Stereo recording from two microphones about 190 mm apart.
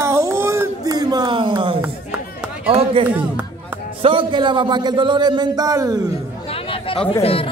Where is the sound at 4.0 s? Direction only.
25° right (ahead or behind).